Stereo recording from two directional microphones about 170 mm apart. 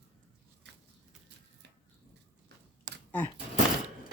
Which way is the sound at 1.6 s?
85° right.